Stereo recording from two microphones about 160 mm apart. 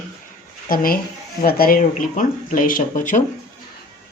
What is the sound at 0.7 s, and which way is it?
Speech, 65° left (ahead or behind).